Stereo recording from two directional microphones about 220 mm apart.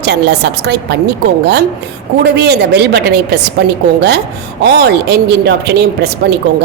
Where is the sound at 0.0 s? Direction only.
50° right (ahead or behind).